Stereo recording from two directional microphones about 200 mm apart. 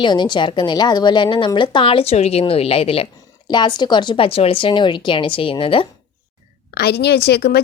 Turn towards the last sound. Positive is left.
turn(degrees=55)  # may be behind; listen again after turning